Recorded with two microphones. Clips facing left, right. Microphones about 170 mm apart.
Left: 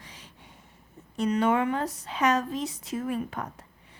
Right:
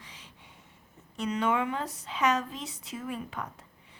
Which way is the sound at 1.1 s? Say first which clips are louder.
Left 4 dB; 40° left (ahead or behind).